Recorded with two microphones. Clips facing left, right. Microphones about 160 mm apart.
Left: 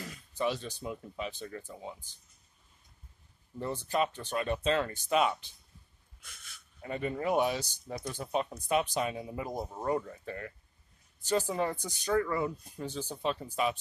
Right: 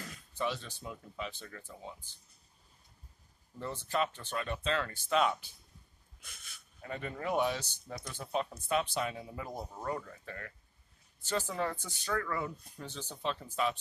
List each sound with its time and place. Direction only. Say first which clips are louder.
0.0 s speech: left 4 dB; 15° left (ahead or behind)
3.5 s speech: left 3 dB; 15° left (ahead or behind)
6.8 s speech: left 5 dB; 15° left (ahead or behind)